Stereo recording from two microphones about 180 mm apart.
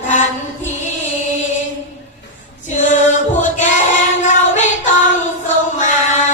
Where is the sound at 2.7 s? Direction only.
40° left (ahead or behind).